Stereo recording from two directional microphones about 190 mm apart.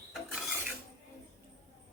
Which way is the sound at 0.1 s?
Centre (ahead or behind).